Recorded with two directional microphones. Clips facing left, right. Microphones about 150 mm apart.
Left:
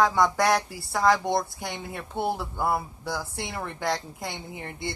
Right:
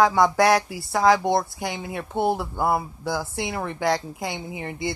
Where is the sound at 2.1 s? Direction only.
25° right (ahead or behind).